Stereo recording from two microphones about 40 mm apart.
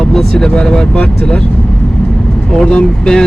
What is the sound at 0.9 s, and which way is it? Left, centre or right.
Speech, left.